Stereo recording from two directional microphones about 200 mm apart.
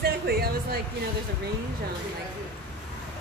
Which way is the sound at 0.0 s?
50° right (ahead or behind).